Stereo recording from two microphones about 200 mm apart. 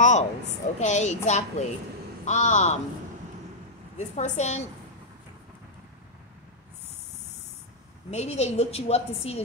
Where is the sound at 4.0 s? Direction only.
35° left (ahead or behind).